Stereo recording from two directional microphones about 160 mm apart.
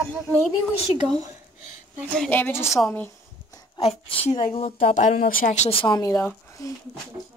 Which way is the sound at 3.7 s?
35° left (ahead or behind).